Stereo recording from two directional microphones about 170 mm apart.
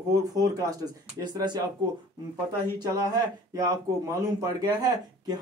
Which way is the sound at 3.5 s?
20° right (ahead or behind).